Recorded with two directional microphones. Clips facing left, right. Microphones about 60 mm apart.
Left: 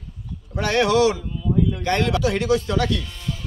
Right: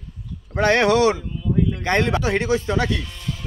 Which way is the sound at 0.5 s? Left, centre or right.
Right.